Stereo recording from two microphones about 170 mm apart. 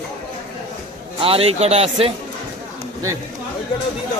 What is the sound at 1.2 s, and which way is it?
Speech, 35° right (ahead or behind).